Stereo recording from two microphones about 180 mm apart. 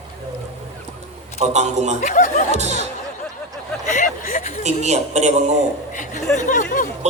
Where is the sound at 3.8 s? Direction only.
45° left (ahead or behind).